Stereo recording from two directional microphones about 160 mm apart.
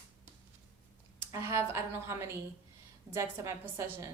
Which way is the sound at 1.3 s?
15° right (ahead or behind).